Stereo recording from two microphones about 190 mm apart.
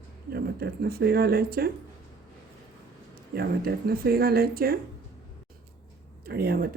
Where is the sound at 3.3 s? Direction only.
55° right (ahead or behind).